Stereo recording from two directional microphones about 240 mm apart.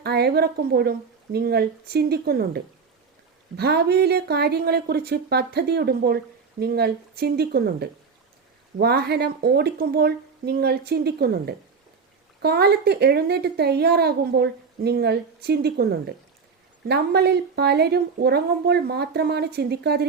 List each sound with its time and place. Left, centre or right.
0.0 s a woman's voice: right
3.6 s a woman's voice: right